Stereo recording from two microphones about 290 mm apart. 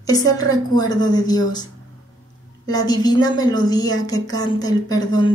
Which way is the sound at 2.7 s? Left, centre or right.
Centre.